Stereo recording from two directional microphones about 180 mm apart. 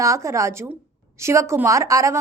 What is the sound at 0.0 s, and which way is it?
A woman's voice, 15° right (ahead or behind).